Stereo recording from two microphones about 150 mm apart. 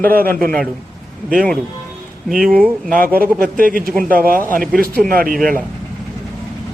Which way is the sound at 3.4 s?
70° right (ahead or behind).